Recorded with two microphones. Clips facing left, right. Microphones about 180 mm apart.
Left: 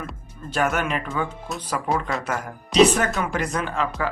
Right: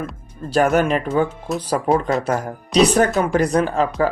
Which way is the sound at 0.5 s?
35° right (ahead or behind).